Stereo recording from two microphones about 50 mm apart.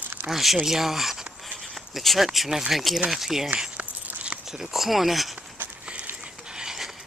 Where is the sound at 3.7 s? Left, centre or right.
Right.